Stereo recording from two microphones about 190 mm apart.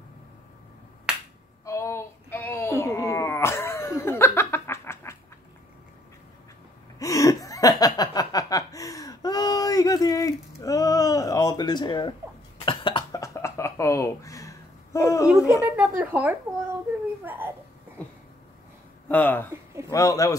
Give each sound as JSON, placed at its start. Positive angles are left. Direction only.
{"t": 1.1, "sound": "finger snapping", "side_deg": -5}
{"t": 1.7, "sound": "a sound", "side_deg": 15}
{"t": 7.0, "sound": "laughter", "side_deg": 20}
{"t": 12.6, "sound": "cough", "side_deg": 25}
{"t": 15.6, "sound": "a sound", "side_deg": -10}
{"t": 17.2, "sound": "baby cry", "side_deg": -10}
{"t": 19.0, "sound": "speech", "side_deg": 10}